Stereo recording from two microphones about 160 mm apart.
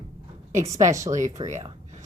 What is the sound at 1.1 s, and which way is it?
Speech, 50° right (ahead or behind).